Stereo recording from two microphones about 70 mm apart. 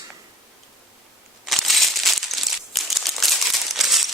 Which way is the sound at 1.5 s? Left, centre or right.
Centre.